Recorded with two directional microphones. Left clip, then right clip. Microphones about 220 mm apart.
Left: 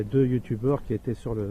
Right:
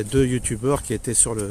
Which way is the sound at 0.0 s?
15° right (ahead or behind).